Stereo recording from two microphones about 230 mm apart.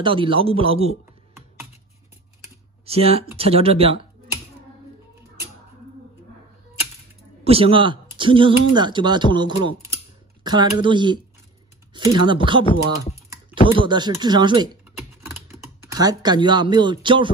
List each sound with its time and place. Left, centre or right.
0.0 s speech: right
2.8 s speech: right
7.4 s speech: right
13.7 s speech: centre